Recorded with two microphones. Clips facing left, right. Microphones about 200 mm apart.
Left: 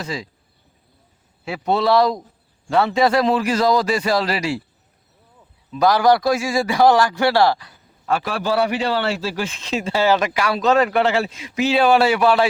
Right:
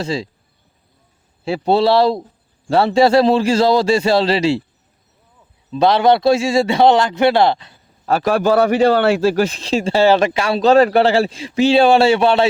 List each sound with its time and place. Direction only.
0.0 s a man's voice: 25° right (ahead or behind)
1.5 s a man's voice: 30° right (ahead or behind)
5.7 s a man's voice: 25° right (ahead or behind)
8.0 s a man's voice: 40° right (ahead or behind); by 12.5 s 25° right (ahead or behind)